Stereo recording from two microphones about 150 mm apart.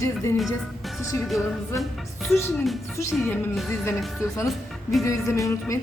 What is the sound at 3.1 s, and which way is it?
Speech, centre (ahead or behind).